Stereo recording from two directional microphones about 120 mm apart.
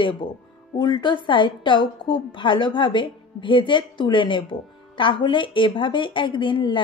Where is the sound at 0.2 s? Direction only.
45° left (ahead or behind).